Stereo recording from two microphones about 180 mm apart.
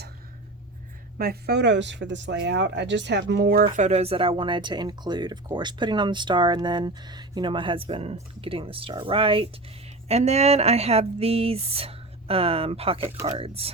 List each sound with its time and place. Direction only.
1.2 s speech: 60° right (ahead or behind); by 13.7 s 35° right (ahead or behind)